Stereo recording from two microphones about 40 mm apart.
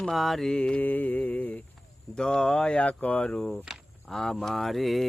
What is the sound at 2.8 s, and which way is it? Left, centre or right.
Speech, left.